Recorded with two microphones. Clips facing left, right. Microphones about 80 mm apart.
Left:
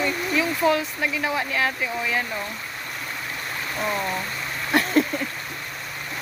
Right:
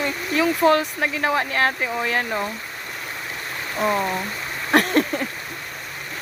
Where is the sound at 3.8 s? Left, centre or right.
Right.